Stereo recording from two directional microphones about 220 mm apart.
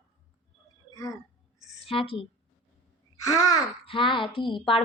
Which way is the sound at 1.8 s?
25° left (ahead or behind).